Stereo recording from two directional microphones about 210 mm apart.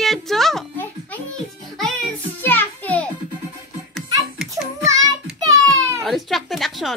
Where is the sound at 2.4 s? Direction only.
10° left (ahead or behind).